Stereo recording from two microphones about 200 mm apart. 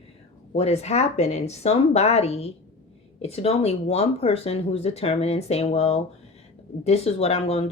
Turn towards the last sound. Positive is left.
turn(degrees=30)  # may be behind; listen again after turning